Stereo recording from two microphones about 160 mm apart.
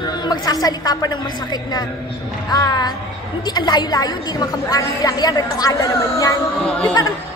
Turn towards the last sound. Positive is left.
turn(degrees=5)  # may be behind; listen again after turning